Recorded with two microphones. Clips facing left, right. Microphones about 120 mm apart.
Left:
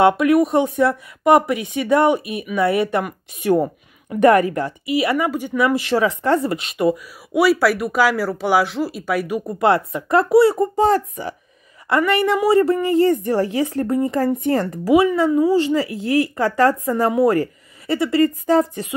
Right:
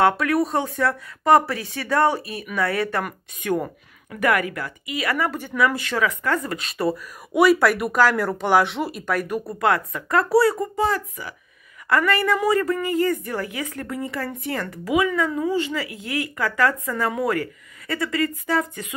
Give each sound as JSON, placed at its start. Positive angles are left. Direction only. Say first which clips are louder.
{"t": 0.0, "sound": "speech", "louder": "left 5 dB", "side_deg": 20}
{"t": 4.1, "sound": "speech", "louder": "left 8 dB", "side_deg": 30}
{"t": 5.8, "sound": "speech", "louder": "left 5 dB", "side_deg": 30}
{"t": 7.3, "sound": "speech", "louder": "left 1 dB", "side_deg": 5}
{"t": 9.6, "sound": "speech", "louder": "left 5 dB", "side_deg": 25}
{"t": 12.1, "sound": "a woman's voice", "louder": "left 6 dB", "side_deg": 25}